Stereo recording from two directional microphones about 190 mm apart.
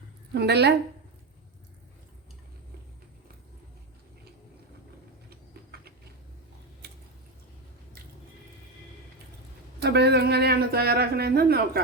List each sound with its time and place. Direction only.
0.3 s speech: 60° right (ahead or behind)
6.8 s a sound: 60° right (ahead or behind)
9.8 s speech: 60° right (ahead or behind)